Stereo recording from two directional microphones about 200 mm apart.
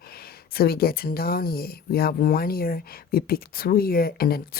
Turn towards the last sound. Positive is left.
turn(degrees=50)  # may be behind; listen again after turning